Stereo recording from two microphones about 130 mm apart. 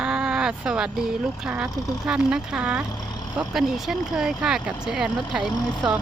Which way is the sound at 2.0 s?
10° right (ahead or behind).